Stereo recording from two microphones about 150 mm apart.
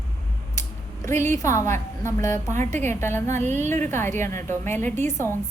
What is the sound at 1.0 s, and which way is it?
A woman's voice, 15° left (ahead or behind).